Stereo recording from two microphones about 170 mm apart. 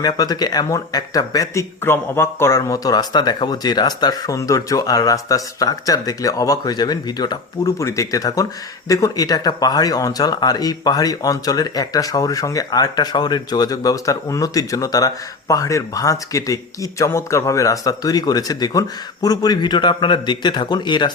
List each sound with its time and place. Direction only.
0.0 s speech: 25° left (ahead or behind)